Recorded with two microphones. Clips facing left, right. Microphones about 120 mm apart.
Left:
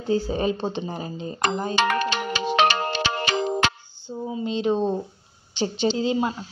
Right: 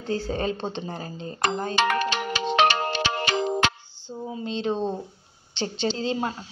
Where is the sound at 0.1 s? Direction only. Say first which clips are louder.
Left 4 dB; 15° left (ahead or behind).